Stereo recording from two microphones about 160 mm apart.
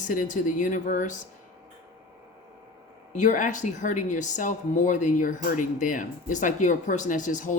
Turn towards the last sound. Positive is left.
turn(degrees=50)  # may be behind; listen again after turning